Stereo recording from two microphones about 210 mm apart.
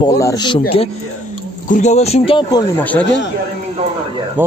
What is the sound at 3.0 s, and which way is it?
Speech, 55° left (ahead or behind).